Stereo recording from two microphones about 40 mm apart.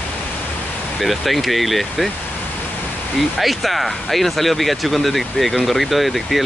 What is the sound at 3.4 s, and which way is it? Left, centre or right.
Speech, centre.